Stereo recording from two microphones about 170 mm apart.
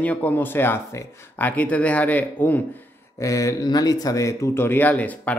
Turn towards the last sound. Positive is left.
turn(degrees=10)  # may be behind; listen again after turning